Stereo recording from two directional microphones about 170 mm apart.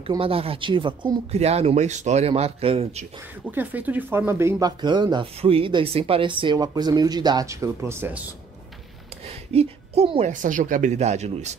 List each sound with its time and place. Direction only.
0.2 s speech: 35° right (ahead or behind)
1.3 s speech: 40° right (ahead or behind)
3.5 s speech: 10° right (ahead or behind)
9.2 s speech: 40° right (ahead or behind)